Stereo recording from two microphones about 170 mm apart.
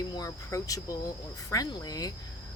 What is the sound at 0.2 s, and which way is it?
Speech, 20° left (ahead or behind).